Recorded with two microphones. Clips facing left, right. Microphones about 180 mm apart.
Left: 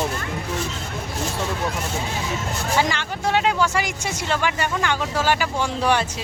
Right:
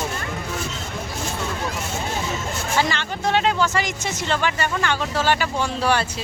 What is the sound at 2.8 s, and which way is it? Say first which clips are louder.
A man's voice: right 1 dB; 10° left (ahead or behind).